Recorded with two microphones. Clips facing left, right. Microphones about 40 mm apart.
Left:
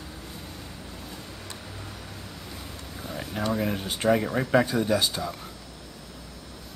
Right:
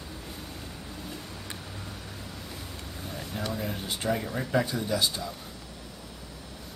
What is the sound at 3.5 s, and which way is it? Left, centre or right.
Speech, left.